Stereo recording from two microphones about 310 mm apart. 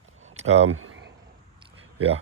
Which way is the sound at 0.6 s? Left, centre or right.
Right.